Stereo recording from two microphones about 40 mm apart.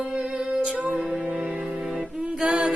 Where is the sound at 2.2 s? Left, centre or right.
Right.